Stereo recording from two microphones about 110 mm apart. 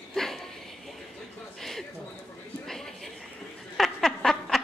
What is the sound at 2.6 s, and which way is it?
Chatter, 5° left (ahead or behind).